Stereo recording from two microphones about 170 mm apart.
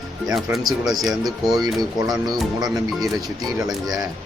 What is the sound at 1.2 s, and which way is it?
Speech, 20° right (ahead or behind).